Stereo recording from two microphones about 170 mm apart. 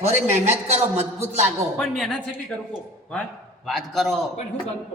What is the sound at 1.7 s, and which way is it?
A man's voice, 5° left (ahead or behind).